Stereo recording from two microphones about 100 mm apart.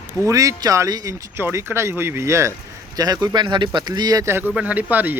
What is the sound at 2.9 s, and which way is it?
Speech, 40° right (ahead or behind).